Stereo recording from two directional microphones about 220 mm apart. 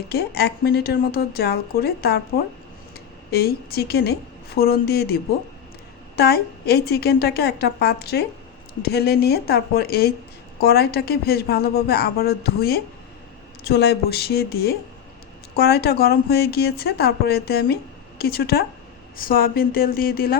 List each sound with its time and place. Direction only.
0.1 s a woman's voice: 45° left (ahead or behind)
6.1 s a woman's voice: 45° left (ahead or behind)